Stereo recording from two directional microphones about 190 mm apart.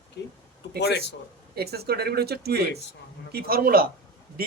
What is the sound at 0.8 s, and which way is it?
Speech, 65° left (ahead or behind).